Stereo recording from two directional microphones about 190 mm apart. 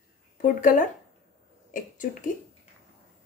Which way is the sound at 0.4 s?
45° left (ahead or behind).